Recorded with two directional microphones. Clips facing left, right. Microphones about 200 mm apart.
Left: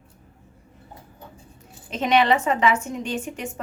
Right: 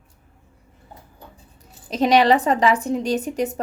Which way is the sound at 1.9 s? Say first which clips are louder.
Right 4 dB; 35° right (ahead or behind).